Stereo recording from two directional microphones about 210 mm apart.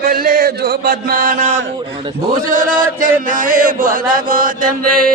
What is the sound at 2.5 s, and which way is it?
Chant, 40° right (ahead or behind).